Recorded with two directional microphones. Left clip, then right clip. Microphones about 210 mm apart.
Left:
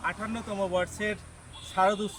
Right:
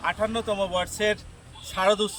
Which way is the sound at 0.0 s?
Centre (ahead or behind).